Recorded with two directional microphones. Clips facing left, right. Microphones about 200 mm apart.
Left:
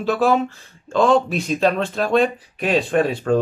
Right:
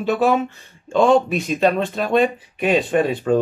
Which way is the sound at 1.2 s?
5° right (ahead or behind).